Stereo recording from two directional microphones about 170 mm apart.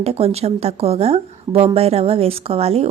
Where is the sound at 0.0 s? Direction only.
35° right (ahead or behind).